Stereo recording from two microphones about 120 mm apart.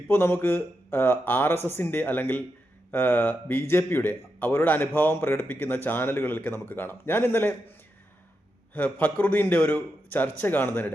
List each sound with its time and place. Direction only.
0.1 s a man's voice: 20° left (ahead or behind)
8.7 s a man's voice: 15° left (ahead or behind)